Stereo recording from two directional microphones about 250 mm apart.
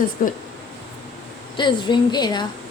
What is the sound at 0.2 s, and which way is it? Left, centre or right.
Speech, left.